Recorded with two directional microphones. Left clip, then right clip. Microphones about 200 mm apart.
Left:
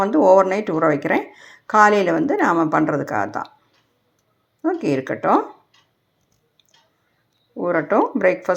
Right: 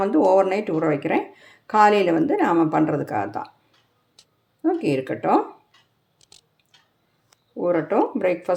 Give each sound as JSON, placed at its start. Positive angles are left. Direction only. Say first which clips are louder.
{"t": 0.1, "sound": "a woman's voice", "louder": "left 4 dB", "side_deg": 0}
{"t": 4.6, "sound": "a woman's voice", "louder": "left 1 dB", "side_deg": 5}
{"t": 7.6, "sound": "a woman's voice", "louder": "left 2 dB", "side_deg": 0}